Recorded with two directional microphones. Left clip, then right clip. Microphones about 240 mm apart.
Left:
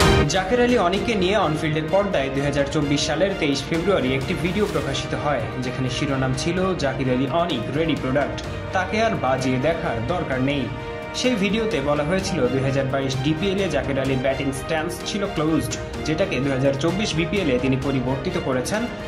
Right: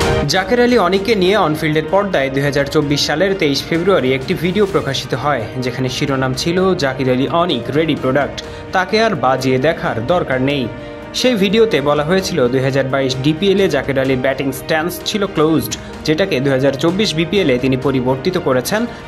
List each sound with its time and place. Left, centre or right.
0.3 s speech: right
5.9 s speech: right